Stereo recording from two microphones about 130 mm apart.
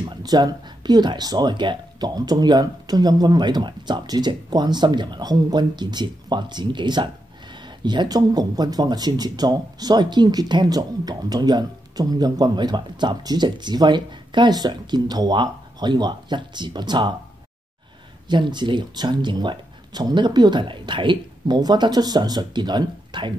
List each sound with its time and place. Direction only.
0.0 s speech: 35° right (ahead or behind)
18.3 s speech: 35° right (ahead or behind)